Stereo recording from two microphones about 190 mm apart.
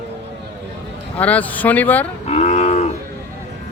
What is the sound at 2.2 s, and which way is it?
Cattle, 35° left (ahead or behind).